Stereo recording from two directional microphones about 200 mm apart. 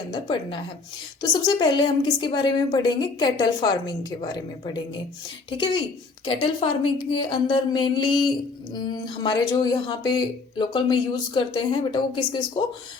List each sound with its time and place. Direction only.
0.1 s speech: 25° left (ahead or behind)